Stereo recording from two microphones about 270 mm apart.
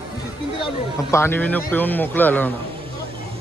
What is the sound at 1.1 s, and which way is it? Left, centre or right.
Speech, centre.